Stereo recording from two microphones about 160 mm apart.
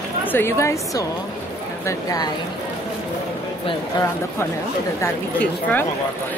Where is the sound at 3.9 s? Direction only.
25° left (ahead or behind).